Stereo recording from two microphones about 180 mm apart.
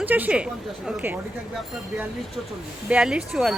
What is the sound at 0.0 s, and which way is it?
A woman's voice, 10° right (ahead or behind).